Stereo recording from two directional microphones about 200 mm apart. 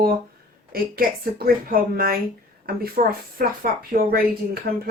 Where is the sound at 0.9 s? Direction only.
45° right (ahead or behind).